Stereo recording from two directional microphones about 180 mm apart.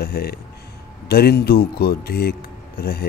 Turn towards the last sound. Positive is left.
turn(degrees=60)  # may be behind; listen again after turning